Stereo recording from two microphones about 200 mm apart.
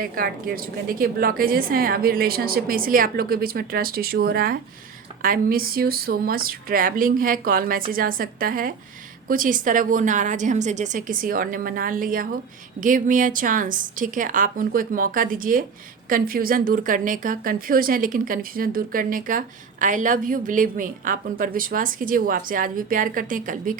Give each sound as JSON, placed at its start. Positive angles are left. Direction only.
{"t": 0.0, "sound": "speech", "side_deg": -45}